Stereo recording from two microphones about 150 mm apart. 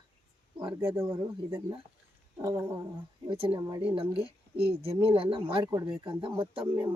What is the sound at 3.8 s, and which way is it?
Speech, 35° right (ahead or behind).